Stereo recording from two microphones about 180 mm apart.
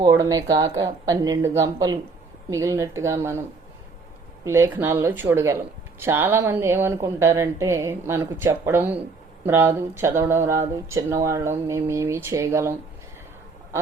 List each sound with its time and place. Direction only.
0.0 s speech: 20° right (ahead or behind)
4.4 s speech: 15° right (ahead or behind)